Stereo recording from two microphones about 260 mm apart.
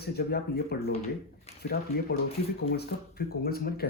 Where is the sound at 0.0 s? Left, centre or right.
Left.